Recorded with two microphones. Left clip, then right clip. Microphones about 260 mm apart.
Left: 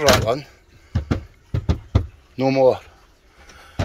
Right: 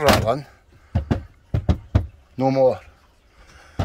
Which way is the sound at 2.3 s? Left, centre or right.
Centre.